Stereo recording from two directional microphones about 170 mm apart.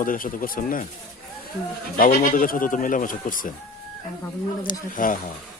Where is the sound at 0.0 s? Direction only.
55° left (ahead or behind).